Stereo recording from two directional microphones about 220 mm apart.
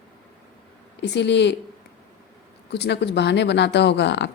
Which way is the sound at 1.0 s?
50° left (ahead or behind).